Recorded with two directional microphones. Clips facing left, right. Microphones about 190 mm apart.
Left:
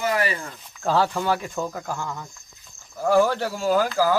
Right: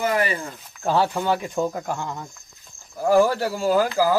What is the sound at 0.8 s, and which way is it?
A man's voice, 15° right (ahead or behind).